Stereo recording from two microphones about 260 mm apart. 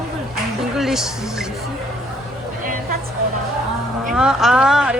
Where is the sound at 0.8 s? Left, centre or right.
Centre.